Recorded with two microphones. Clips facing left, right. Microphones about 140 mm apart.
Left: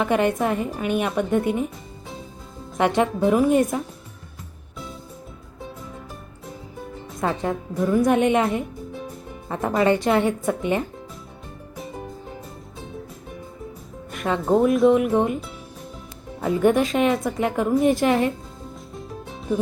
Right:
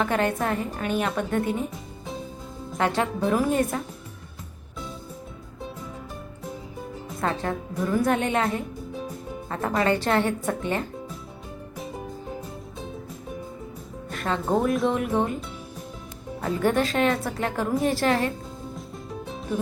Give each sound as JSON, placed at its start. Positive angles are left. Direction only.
{"t": 0.0, "sound": "a woman's voice", "side_deg": 15}
{"t": 2.7, "sound": "speech", "side_deg": 20}
{"t": 3.2, "sound": "speech", "side_deg": 0}
{"t": 3.5, "sound": "a woman's voice", "side_deg": 15}
{"t": 7.2, "sound": "a woman's voice", "side_deg": 10}
{"t": 10.1, "sound": "a woman's voice", "side_deg": 5}
{"t": 14.1, "sound": "speech", "side_deg": 5}
{"t": 16.6, "sound": "a woman's voice", "side_deg": 10}
{"t": 18.9, "sound": "music", "side_deg": 0}